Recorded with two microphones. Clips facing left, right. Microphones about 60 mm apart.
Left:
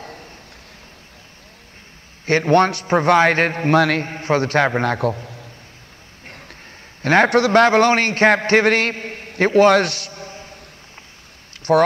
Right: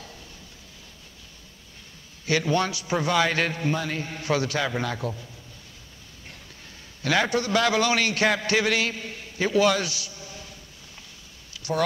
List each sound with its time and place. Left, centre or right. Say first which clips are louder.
0.0 s a sound: left 8 dB; left
2.2 s a man's voice: left 9 dB; left
3.7 s a man's voice: left 13 dB; left
4.0 s a man's voice: left 6 dB; left
6.2 s a sound: left 7 dB; left
7.0 s a man's voice: left 9 dB; left
7.2 s a man's voice: left 10 dB; left
7.6 s a man's voice: left 8 dB; left
10.3 s a sound: left 5 dB; left